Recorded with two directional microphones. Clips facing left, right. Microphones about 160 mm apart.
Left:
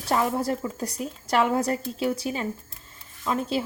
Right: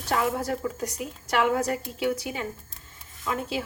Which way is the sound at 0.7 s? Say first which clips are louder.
Left 1 dB; 35° left (ahead or behind).